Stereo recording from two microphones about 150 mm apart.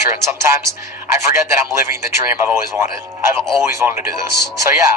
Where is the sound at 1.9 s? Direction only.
20° right (ahead or behind).